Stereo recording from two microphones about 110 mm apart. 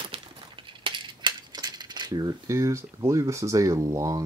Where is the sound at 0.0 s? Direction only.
50° right (ahead or behind).